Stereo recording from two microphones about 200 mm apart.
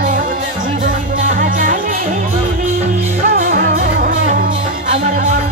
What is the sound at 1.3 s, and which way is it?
Music, 40° right (ahead or behind).